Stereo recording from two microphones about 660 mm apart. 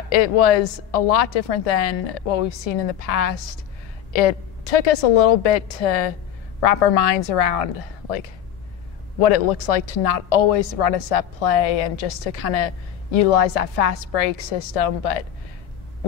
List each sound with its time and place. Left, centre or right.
0.1 s a woman's voice: left